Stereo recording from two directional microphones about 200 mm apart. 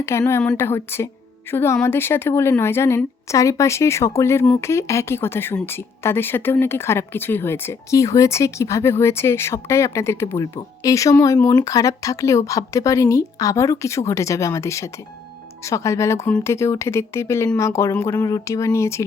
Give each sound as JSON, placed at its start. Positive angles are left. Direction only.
{"t": 0.0, "sound": "a woman's voice", "side_deg": 15}